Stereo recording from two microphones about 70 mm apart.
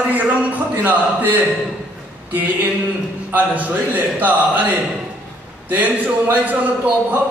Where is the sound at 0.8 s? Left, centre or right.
Right.